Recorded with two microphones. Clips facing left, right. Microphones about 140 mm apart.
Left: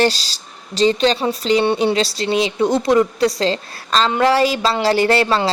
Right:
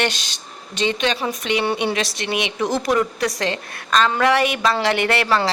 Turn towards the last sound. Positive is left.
turn(degrees=25)  # may be behind; listen again after turning